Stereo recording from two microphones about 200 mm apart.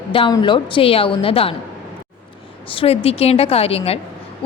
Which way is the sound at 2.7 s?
25° left (ahead or behind).